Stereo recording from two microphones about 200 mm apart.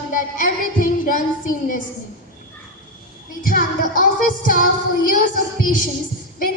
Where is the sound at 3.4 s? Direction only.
45° left (ahead or behind).